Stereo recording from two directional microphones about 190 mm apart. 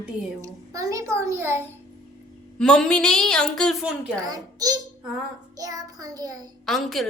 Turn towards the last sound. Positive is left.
turn(degrees=0)  # may be behind; listen again after turning